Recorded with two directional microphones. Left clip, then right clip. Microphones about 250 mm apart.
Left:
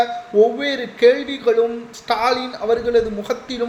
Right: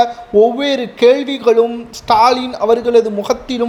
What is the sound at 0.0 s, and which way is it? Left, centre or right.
A man's voice, right.